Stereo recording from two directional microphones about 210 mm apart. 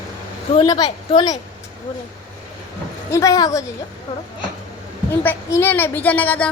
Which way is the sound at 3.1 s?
15° left (ahead or behind).